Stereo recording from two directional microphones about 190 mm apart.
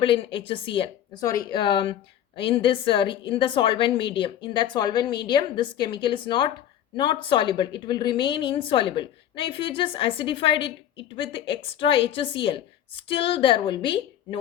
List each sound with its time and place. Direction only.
0.0 s speech: 30° left (ahead or behind)